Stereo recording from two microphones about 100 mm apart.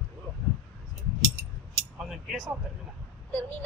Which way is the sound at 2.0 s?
Centre (ahead or behind).